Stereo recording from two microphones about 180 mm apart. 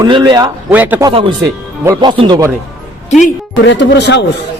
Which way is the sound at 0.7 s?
10° right (ahead or behind).